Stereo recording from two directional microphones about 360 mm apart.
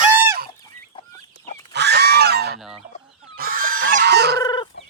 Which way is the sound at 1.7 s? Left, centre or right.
Right.